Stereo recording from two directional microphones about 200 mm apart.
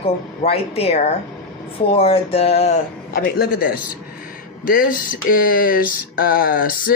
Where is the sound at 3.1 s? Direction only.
45° left (ahead or behind).